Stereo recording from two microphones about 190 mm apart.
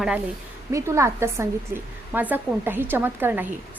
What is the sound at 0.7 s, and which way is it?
A woman's voice, 15° right (ahead or behind).